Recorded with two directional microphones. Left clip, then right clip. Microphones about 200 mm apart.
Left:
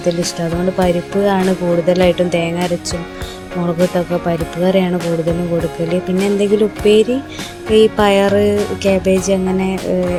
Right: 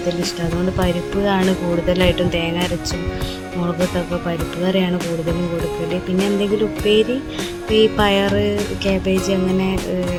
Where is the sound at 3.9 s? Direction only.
15° left (ahead or behind).